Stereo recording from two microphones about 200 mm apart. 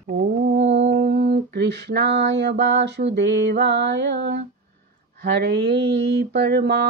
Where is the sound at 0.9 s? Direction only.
55° right (ahead or behind).